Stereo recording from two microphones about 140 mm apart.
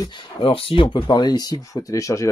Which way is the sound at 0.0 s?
30° left (ahead or behind).